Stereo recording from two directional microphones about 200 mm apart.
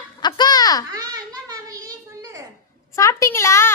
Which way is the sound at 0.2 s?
20° left (ahead or behind).